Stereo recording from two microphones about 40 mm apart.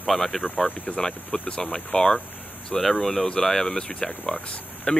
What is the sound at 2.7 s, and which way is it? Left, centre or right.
Speech, centre.